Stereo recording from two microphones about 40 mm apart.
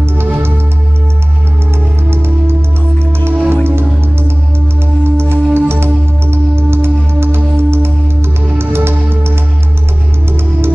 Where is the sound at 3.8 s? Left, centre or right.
Right.